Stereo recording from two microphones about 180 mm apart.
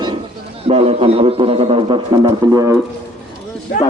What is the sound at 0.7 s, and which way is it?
A man's voice, 35° right (ahead or behind).